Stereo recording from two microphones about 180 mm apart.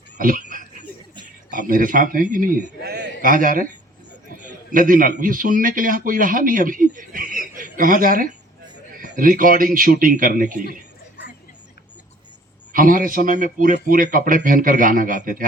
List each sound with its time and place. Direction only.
0.2 s a sound: 45° right (ahead or behind)
1.5 s a man's voice: 50° right (ahead or behind)
2.8 s a sound: 65° right (ahead or behind)
4.4 s a man's voice: 45° right (ahead or behind)
7.3 s chuckle: 50° right (ahead or behind)
9.0 s a man's voice: 50° right (ahead or behind)
12.7 s a man's voice: 50° right (ahead or behind)